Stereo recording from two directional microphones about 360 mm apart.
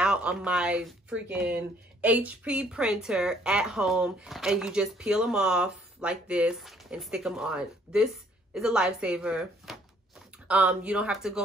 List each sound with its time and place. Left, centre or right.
0.0 s a woman's voice: centre